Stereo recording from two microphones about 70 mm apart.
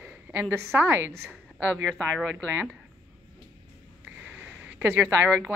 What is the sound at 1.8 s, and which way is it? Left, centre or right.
Speech, centre.